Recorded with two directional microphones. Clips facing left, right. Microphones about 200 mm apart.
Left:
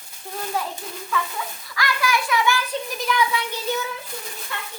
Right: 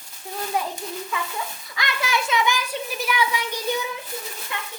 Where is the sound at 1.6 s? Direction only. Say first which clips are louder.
Left 5 dB; 20° right (ahead or behind).